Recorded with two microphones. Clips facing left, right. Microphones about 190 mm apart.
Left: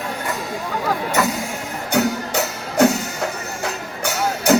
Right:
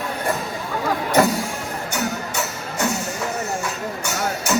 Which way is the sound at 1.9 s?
60° left (ahead or behind).